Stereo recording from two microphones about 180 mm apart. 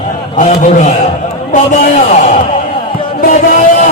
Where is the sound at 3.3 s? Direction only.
50° left (ahead or behind).